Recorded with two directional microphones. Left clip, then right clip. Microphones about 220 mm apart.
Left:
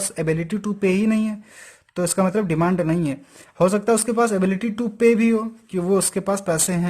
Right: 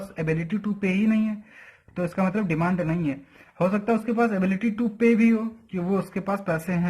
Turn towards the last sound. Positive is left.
turn(degrees=40)  # may be behind; listen again after turning